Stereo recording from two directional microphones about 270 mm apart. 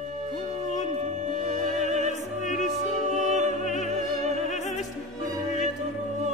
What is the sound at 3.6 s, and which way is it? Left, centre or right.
Music, left.